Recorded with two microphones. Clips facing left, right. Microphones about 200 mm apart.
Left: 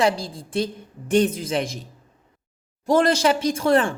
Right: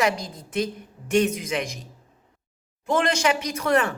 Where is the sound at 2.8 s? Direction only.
35° left (ahead or behind).